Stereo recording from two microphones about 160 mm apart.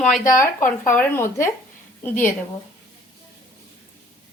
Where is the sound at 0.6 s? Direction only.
15° left (ahead or behind).